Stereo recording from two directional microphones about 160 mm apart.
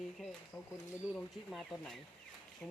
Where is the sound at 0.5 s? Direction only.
10° left (ahead or behind).